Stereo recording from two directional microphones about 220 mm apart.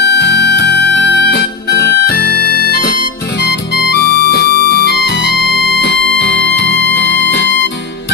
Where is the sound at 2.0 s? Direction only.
90° left.